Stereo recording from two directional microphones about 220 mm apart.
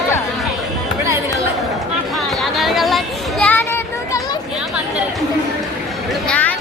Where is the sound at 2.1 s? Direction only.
Centre (ahead or behind); by 4.4 s 15° left (ahead or behind).